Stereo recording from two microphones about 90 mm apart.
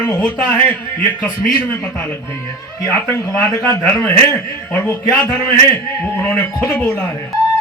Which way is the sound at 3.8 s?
20° left (ahead or behind).